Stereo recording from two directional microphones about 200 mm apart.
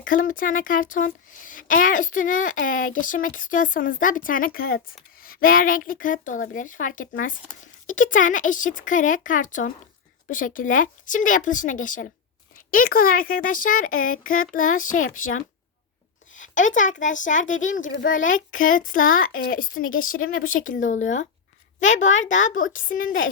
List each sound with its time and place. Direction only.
0.0 s speech: 45° left (ahead or behind)
16.3 s a sound: 40° left (ahead or behind)
17.0 s a child's voice: 40° left (ahead or behind)